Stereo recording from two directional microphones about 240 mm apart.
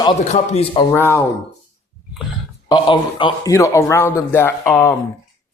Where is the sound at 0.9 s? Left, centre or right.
Centre.